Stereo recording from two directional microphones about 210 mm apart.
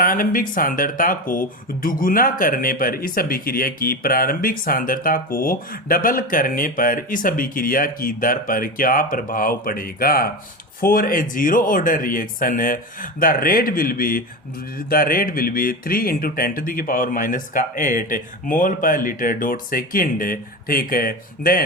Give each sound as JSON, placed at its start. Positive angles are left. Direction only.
{"t": 0.0, "sound": "speech", "side_deg": 40}